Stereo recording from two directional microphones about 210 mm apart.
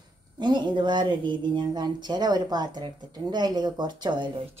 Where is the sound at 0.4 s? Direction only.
20° right (ahead or behind).